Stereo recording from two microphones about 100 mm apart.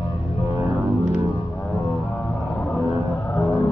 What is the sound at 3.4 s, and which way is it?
Vehicle, 30° left (ahead or behind).